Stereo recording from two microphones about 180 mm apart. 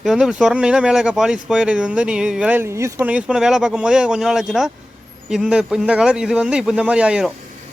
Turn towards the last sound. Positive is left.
turn(degrees=-5)  # may be behind; listen again after turning